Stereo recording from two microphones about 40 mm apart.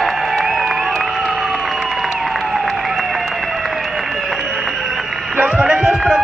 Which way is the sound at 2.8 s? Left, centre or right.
Centre.